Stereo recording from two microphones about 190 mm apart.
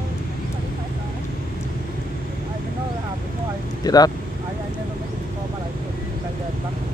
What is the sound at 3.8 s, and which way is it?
Vehicle, 20° left (ahead or behind).